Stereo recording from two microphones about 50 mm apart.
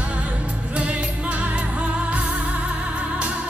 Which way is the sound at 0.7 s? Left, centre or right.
Right.